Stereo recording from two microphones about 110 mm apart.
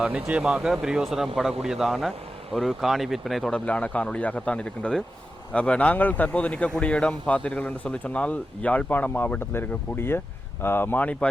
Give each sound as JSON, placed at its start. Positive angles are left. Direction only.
{"t": 0.0, "sound": "a man's voice", "side_deg": -10}
{"t": 3.7, "sound": "a man's voice", "side_deg": 10}